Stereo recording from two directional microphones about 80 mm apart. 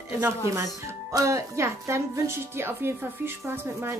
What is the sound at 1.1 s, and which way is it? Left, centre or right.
A woman's voice, right.